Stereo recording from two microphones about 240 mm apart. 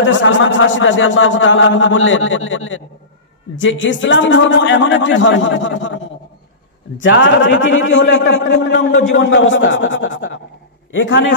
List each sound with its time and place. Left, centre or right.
0.0 s speech: left
7.0 s speech: left